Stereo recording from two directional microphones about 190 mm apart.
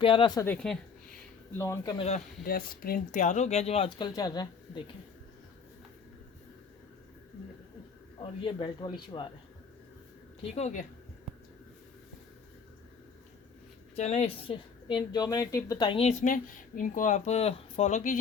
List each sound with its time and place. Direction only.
0.0 s speech: 30° left (ahead or behind); by 1.2 s 5° left (ahead or behind)
1.5 s speech: 15° left (ahead or behind)
2.4 s speech: 50° left (ahead or behind); by 4.8 s 20° left (ahead or behind)
8.2 s a woman's voice: 25° left (ahead or behind)
10.4 s speech: 35° left (ahead or behind)
13.9 s a woman's voice: 35° left (ahead or behind); by 16.0 s 20° left (ahead or behind)
16.0 s speech: 35° left (ahead or behind)